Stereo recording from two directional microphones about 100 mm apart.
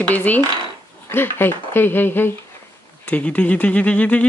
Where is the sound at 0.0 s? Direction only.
15° left (ahead or behind).